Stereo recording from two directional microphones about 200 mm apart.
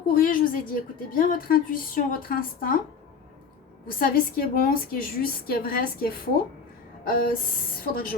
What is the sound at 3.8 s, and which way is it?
A woman's voice, 45° left (ahead or behind).